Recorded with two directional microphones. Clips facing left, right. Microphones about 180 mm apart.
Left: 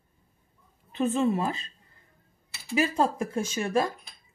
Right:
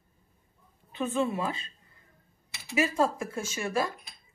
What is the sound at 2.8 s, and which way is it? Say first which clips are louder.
Speech: left 1 dB; 30° left (ahead or behind).